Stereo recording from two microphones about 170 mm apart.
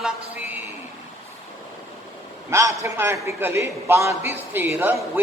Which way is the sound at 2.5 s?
15° right (ahead or behind).